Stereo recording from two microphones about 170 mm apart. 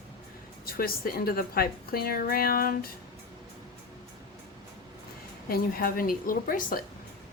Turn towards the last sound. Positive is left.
turn(degrees=55)  # may be behind; listen again after turning